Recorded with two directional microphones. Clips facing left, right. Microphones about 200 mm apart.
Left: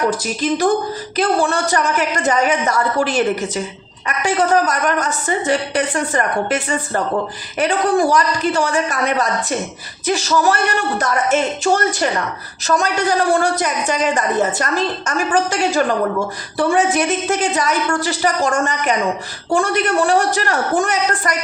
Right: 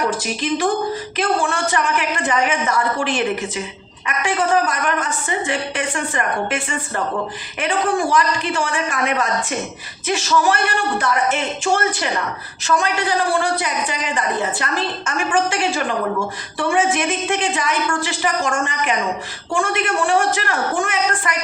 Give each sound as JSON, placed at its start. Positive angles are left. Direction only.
{"t": 0.4, "sound": "a woman's voice", "side_deg": 40}